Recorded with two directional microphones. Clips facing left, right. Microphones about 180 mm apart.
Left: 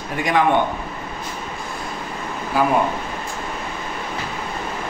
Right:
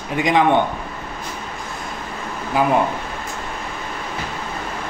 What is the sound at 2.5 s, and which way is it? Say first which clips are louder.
Speech: right 1 dB; 20° right (ahead or behind).